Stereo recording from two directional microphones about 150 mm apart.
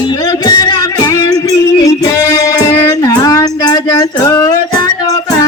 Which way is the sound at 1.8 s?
25° left (ahead or behind).